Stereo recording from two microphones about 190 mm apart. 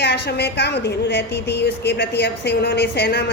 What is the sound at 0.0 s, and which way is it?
A woman's voice, 60° left (ahead or behind).